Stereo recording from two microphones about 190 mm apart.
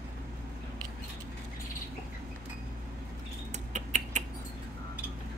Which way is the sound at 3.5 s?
40° right (ahead or behind).